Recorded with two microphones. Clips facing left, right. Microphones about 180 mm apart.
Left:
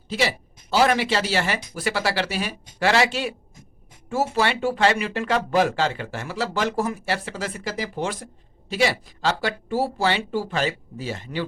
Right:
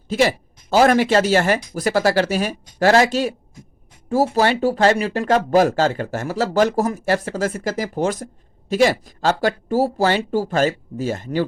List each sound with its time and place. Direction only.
0.1 s speech: 50° right (ahead or behind)